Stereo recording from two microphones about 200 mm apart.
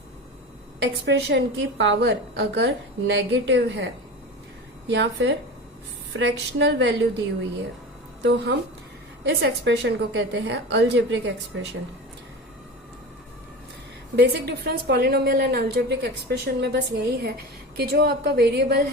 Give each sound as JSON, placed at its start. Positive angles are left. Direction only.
{"t": 1.0, "sound": "a woman's voice", "side_deg": -60}
{"t": 4.9, "sound": "a woman's voice", "side_deg": -60}
{"t": 8.2, "sound": "a woman's voice", "side_deg": -55}
{"t": 14.2, "sound": "a woman's voice", "side_deg": -55}